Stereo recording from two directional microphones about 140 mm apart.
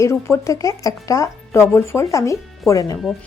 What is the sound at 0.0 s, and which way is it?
A woman's voice, 20° left (ahead or behind).